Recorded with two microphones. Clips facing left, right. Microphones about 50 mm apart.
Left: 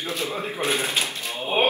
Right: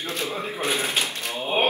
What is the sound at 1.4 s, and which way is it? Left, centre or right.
Ratchet, centre.